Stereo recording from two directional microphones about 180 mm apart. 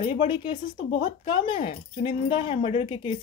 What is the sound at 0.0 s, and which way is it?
Speech, 25° left (ahead or behind).